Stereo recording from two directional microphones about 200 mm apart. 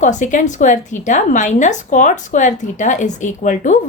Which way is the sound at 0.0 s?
40° left (ahead or behind).